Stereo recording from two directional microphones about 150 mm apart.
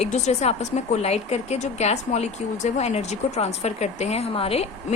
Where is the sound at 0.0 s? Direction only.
50° left (ahead or behind).